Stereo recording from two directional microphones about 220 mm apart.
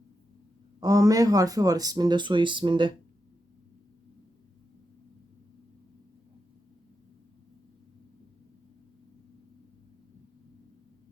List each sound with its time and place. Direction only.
0.8 s speech: 15° right (ahead or behind)